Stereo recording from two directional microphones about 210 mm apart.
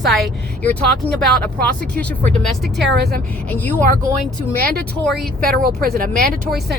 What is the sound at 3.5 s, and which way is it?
Speech, 10° left (ahead or behind).